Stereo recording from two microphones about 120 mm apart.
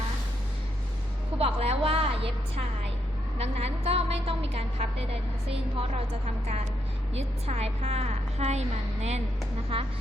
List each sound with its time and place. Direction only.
1.4 s a sound: 55° right (ahead or behind)
3.3 s vehicle: 60° right (ahead or behind)
7.1 s a woman's voice: 60° right (ahead or behind)
9.7 s speech: 50° right (ahead or behind)